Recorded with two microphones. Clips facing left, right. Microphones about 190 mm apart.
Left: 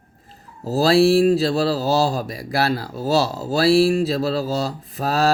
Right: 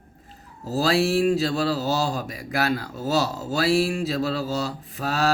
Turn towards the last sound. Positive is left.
turn(degrees=35)  # may be behind; listen again after turning